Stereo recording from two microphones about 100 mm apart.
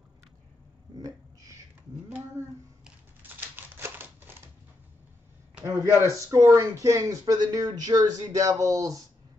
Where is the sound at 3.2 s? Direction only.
20° right (ahead or behind).